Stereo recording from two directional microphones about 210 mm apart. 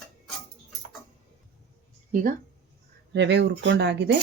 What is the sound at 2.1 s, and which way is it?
Speech, 40° right (ahead or behind).